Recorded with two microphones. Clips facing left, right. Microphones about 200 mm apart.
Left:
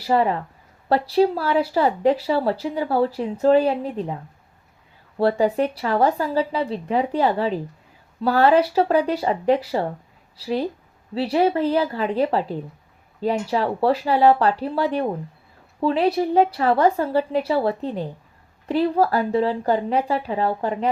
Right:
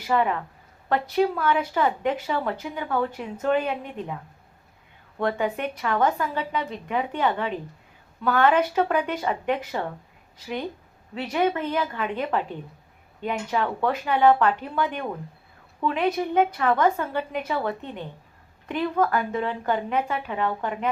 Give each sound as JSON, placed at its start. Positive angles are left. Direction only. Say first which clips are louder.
{"t": 0.0, "sound": "speech", "louder": "left 4 dB", "side_deg": 35}